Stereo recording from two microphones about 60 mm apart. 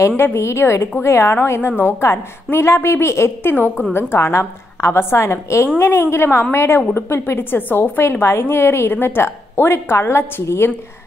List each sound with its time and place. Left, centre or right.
0.2 s a woman's voice: left
3.5 s a woman's voice: left
3.9 s a woman's voice: left